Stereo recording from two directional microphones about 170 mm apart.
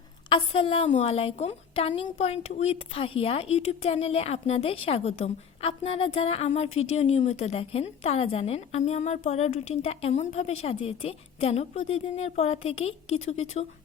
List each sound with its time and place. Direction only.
0.3 s a woman's voice: 30° left (ahead or behind)